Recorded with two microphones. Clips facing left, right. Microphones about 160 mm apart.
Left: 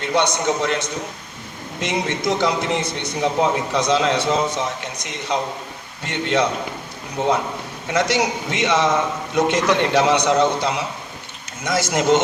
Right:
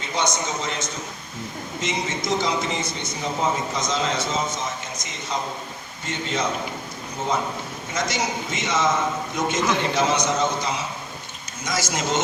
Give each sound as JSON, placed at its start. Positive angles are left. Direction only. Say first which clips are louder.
{"t": 0.0, "sound": "a man's voice", "louder": "left 6 dB", "side_deg": 65}